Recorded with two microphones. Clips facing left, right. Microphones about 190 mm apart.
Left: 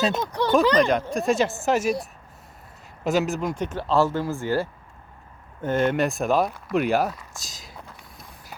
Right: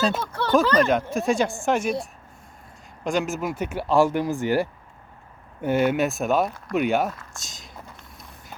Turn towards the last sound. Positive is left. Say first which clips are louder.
# even
turn(degrees=0)  # may be behind; listen again after turning